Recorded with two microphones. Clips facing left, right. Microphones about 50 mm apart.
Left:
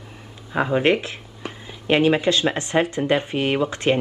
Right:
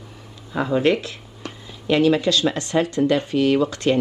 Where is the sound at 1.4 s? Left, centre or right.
Centre.